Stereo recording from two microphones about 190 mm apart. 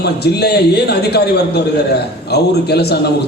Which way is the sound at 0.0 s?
60° left (ahead or behind).